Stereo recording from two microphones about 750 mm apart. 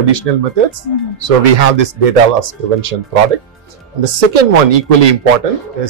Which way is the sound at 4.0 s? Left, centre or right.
Right.